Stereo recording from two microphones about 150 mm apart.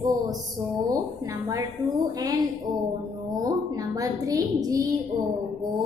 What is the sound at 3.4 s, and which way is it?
A woman's voice, 25° right (ahead or behind).